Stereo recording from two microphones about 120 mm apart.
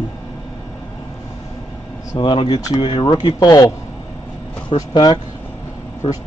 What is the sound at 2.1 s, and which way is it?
Speech, 45° left (ahead or behind).